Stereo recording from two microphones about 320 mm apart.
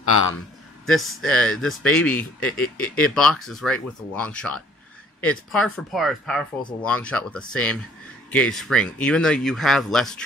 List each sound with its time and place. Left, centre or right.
0.1 s a man's voice: left
0.8 s speech: centre